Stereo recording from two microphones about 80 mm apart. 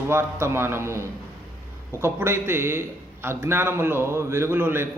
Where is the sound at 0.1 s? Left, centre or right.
Right.